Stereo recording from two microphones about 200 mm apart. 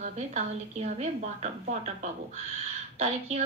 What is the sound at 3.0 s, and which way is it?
Speech, 30° right (ahead or behind).